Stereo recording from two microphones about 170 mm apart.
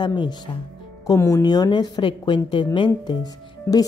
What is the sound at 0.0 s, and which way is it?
A woman's voice, 25° left (ahead or behind).